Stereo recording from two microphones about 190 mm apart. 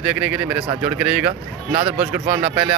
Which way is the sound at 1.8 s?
30° right (ahead or behind).